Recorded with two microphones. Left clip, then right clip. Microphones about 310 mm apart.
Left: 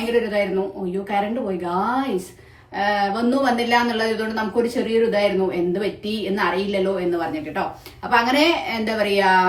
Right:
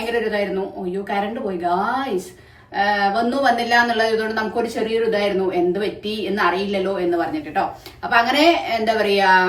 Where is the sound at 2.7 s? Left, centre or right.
Centre.